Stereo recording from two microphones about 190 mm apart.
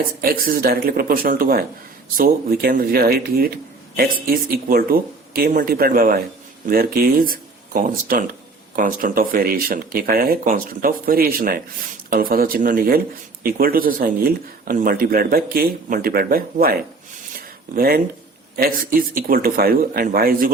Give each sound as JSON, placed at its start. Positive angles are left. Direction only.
{"t": 0.2, "sound": "speech", "side_deg": -50}
{"t": 17.3, "sound": "a sound", "side_deg": -50}
{"t": 18.5, "sound": "speech", "side_deg": -50}